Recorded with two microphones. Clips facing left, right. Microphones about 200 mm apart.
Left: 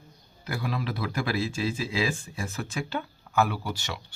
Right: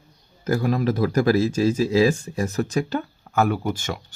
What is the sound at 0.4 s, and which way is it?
Speech, 45° right (ahead or behind).